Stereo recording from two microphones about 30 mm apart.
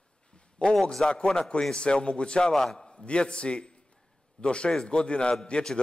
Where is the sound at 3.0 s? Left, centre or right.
Left.